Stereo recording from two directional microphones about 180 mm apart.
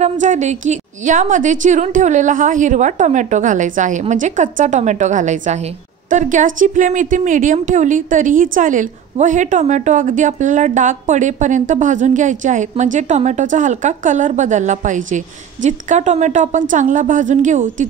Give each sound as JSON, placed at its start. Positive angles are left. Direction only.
{"t": 0.0, "sound": "a woman's voice", "side_deg": -45}